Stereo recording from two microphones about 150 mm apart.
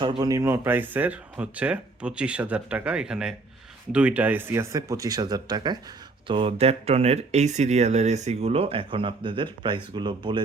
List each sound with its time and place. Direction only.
0.0 s speech: 30° right (ahead or behind)